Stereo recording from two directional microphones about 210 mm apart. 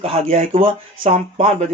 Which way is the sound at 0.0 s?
30° right (ahead or behind).